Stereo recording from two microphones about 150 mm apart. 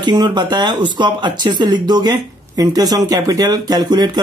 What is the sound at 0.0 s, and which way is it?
Speech, 30° right (ahead or behind).